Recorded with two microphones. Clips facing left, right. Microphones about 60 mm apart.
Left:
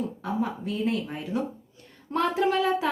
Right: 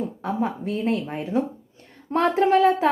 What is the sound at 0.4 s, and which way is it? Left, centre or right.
A woman's voice, right.